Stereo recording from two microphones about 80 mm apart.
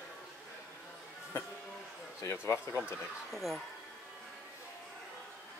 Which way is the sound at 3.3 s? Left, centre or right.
Centre.